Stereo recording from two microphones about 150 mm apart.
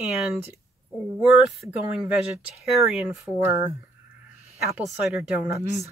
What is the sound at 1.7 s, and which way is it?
Speech, 10° right (ahead or behind).